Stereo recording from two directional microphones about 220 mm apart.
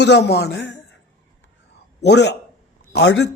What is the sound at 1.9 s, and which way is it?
A man's voice, 50° left (ahead or behind).